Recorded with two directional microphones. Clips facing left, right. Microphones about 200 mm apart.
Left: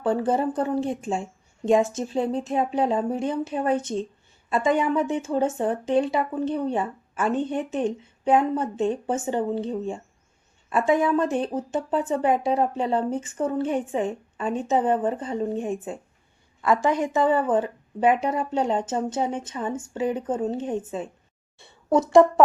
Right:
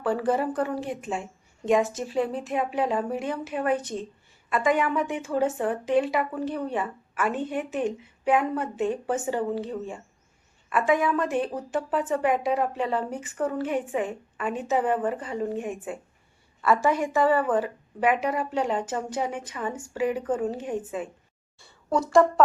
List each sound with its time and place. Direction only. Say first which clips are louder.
0.0 s speech: left 2 dB; 25° left (ahead or behind)
10.7 s speech: left 2 dB; 25° left (ahead or behind)
16.8 s a woman's voice: left 1 dB; 20° left (ahead or behind)